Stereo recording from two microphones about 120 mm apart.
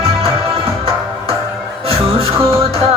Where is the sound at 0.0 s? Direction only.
55° right (ahead or behind).